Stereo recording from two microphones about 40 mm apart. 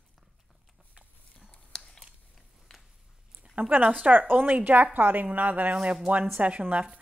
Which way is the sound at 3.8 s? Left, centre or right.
Right.